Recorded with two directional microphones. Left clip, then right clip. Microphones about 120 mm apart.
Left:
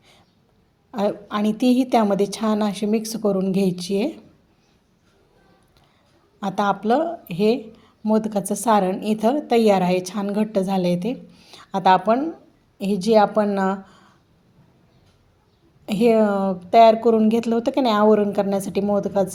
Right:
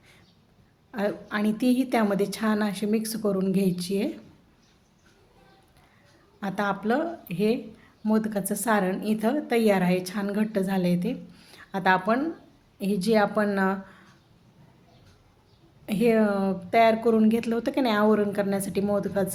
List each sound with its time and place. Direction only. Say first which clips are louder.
0.9 s a woman's voice: left 5 dB; 35° left (ahead or behind)
3.5 s a woman's voice: left 5 dB; 30° left (ahead or behind)
6.4 s a woman's voice: left 6 dB; 35° left (ahead or behind)
11.3 s a sound: left 5 dB; 20° left (ahead or behind)
11.7 s a woman's voice: left 6 dB; 30° left (ahead or behind)
15.9 s speech: left 6 dB; 30° left (ahead or behind)